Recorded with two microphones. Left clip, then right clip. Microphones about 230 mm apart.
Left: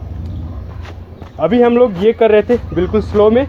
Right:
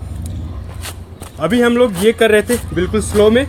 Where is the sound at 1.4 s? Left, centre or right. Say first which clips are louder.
Left 2 dB; right.